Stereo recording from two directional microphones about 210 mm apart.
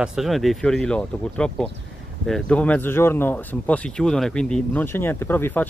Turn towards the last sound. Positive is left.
turn(degrees=10)  # may be behind; listen again after turning